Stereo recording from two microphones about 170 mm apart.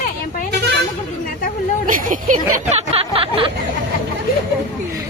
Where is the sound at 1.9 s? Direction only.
50° right (ahead or behind).